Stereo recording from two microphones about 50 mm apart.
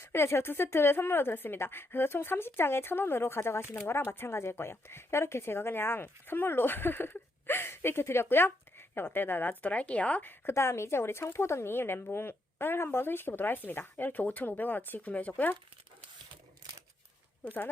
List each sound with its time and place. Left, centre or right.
0.0 s a woman's voice: left
10.5 s a woman's voice: left
17.4 s speech: left